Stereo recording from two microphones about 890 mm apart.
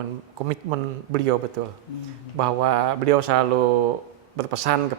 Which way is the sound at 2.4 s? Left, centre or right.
Right.